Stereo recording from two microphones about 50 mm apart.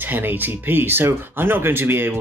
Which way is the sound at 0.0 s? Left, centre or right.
Right.